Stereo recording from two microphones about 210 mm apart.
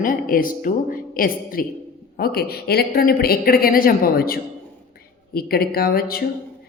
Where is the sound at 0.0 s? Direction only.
40° left (ahead or behind).